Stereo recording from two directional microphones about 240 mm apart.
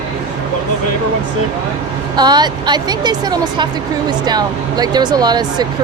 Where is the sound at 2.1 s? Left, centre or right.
Centre.